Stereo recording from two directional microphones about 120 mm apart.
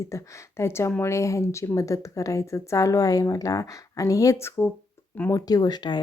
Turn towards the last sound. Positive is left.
turn(degrees=35)  # may be behind; listen again after turning